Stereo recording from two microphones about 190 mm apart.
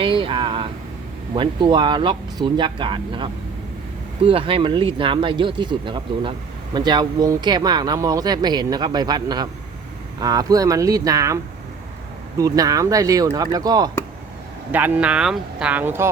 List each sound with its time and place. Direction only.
0.0 s vehicle: 25° right (ahead or behind)
1.4 s speech: 25° right (ahead or behind)
12.4 s speech: 20° right (ahead or behind)
14.7 s speech: 10° right (ahead or behind)